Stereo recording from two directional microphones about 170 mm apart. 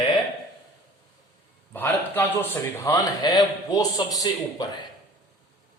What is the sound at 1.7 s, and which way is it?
Speech, 10° left (ahead or behind).